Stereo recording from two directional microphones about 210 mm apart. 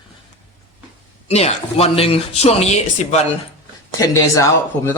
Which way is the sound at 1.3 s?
30° left (ahead or behind).